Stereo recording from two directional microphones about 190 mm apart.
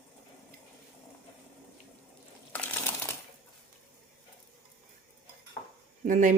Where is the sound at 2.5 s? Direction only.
10° left (ahead or behind).